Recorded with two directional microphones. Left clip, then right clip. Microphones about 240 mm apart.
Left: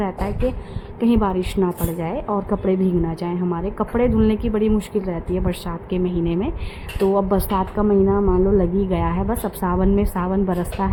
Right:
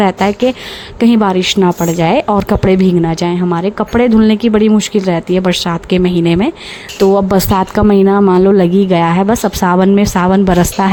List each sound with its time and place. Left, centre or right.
0.0 s a woman's voice: right